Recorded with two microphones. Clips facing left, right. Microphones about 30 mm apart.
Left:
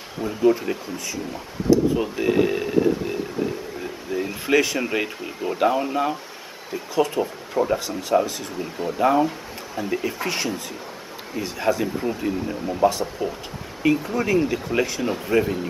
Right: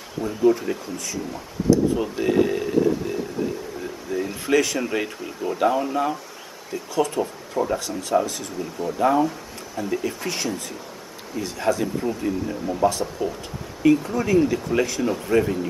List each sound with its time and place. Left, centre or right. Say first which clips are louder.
0.2 s speech: even; centre